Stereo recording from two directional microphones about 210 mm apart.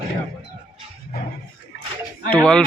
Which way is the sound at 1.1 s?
45° left (ahead or behind).